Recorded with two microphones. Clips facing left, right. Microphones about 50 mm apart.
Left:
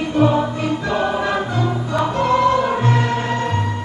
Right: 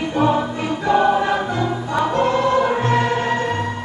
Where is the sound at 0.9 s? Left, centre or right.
Centre.